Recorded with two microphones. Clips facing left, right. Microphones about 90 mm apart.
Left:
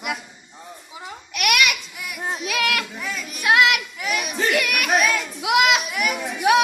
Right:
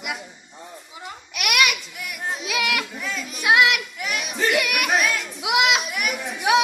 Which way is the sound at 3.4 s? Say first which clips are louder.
Even; 15° right (ahead or behind).